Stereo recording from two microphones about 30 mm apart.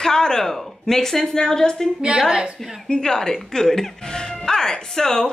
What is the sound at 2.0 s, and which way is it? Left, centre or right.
Speech, right.